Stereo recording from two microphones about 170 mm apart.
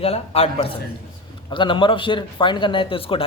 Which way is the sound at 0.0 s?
35° left (ahead or behind).